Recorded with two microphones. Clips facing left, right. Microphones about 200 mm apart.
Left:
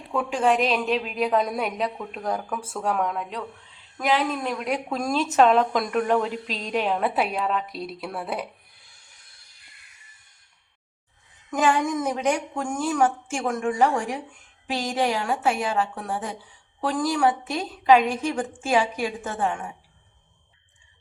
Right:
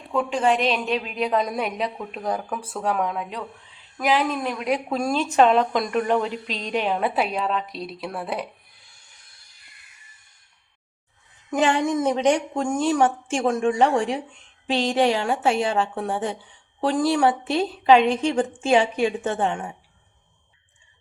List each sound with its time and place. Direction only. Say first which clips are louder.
0.1 s a woman's voice: right 1 dB; centre (ahead or behind)
11.5 s a woman's voice: right 2 dB; 25° right (ahead or behind)